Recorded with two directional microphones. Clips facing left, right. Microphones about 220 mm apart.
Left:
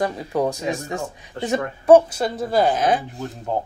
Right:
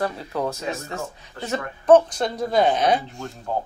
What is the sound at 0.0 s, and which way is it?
Speech, 15° left (ahead or behind).